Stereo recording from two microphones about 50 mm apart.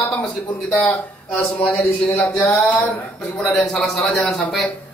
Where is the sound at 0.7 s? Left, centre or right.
Left.